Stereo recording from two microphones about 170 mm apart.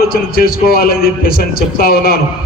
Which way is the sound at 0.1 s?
60° left (ahead or behind).